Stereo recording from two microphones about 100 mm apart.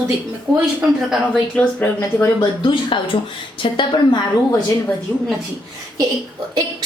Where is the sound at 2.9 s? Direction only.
60° left (ahead or behind).